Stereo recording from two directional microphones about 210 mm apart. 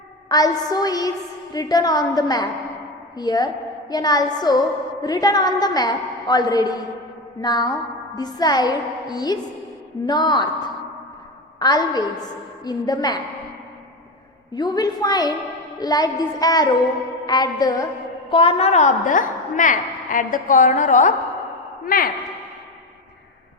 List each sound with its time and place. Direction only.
0.3 s a woman's voice: 20° left (ahead or behind)
11.6 s a woman's voice: 20° left (ahead or behind)
14.5 s a woman's voice: 20° left (ahead or behind); by 22.1 s 45° left (ahead or behind)